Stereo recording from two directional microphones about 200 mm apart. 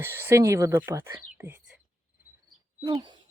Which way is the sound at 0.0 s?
10° right (ahead or behind).